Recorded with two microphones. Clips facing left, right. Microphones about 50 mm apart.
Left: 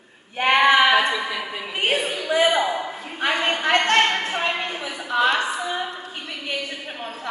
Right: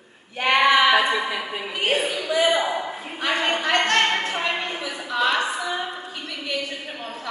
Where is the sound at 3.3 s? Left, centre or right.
Centre.